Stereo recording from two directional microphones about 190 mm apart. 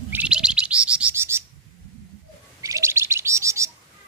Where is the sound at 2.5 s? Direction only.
15° right (ahead or behind).